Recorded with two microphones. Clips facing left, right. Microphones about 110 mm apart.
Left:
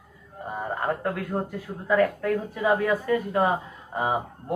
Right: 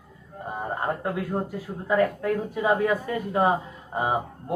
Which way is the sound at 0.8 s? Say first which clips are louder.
Even; 10° right (ahead or behind).